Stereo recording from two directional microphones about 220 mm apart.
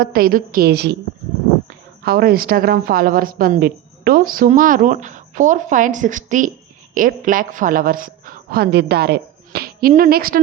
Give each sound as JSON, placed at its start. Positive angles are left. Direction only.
{"t": 0.0, "sound": "a woman's voice", "side_deg": -45}
{"t": 2.0, "sound": "a woman's voice", "side_deg": -45}